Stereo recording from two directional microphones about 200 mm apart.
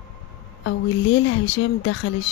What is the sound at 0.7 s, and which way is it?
A woman's voice, 65° left (ahead or behind).